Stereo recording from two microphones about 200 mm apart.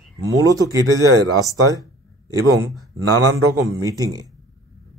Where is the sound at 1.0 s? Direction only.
90° right.